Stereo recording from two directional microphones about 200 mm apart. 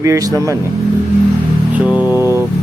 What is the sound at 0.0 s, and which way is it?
Speech, 15° right (ahead or behind).